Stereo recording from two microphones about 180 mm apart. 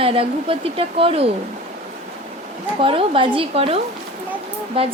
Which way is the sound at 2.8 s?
30° right (ahead or behind).